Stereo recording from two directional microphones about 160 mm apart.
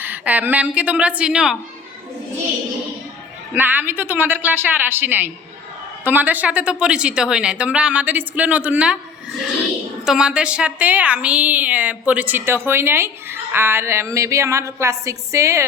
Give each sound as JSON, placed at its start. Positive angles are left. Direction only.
{"t": 0.0, "sound": "a woman's voice", "side_deg": -10}
{"t": 3.5, "sound": "a woman's voice", "side_deg": -10}